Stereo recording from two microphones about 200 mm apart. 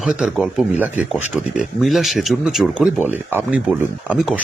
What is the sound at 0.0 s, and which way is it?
Speech, 5° right (ahead or behind).